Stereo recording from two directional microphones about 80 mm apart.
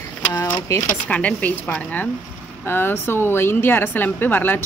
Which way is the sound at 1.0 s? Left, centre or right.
Centre.